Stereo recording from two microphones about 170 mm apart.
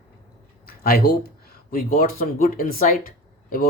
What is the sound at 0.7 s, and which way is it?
Speech, 60° left (ahead or behind).